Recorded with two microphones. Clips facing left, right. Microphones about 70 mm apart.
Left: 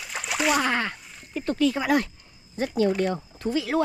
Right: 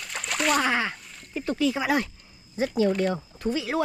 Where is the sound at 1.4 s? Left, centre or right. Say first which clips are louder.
Left 2 dB; centre.